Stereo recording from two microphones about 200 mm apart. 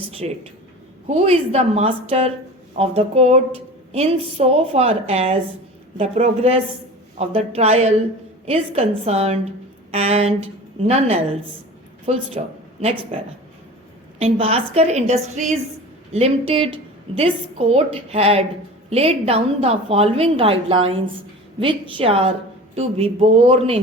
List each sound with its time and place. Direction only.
1.1 s a woman's voice: 30° right (ahead or behind)
14.2 s a woman's voice: 30° right (ahead or behind)